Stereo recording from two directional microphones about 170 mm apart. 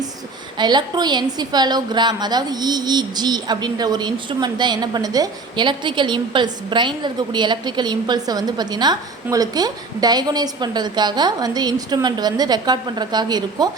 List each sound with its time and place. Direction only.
0.6 s a woman's voice: 25° right (ahead or behind)